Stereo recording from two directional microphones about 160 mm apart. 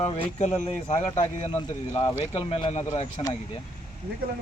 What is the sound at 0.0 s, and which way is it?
Speech, 40° left (ahead or behind).